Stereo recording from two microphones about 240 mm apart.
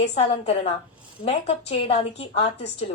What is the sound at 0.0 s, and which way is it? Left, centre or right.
Speech, left.